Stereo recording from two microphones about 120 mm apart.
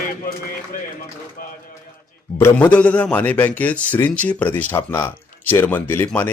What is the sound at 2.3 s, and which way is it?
A man's voice, 15° left (ahead or behind).